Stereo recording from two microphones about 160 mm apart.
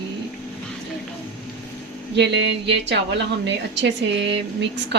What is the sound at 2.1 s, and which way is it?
A woman's voice, 90° right.